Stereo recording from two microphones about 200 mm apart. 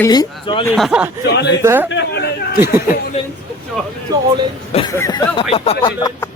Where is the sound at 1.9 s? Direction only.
60° left (ahead or behind).